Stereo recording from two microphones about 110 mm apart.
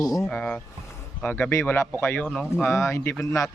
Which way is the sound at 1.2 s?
20° left (ahead or behind).